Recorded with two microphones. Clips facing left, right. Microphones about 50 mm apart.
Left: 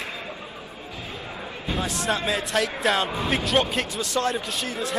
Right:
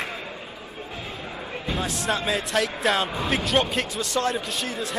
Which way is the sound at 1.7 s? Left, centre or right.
Centre.